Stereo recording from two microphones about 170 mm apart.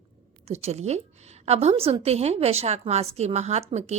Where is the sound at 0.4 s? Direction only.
40° right (ahead or behind).